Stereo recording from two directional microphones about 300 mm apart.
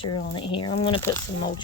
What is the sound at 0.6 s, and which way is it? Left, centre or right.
Speech, left.